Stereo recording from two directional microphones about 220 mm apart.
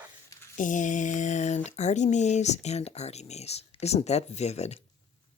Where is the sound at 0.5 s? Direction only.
35° left (ahead or behind).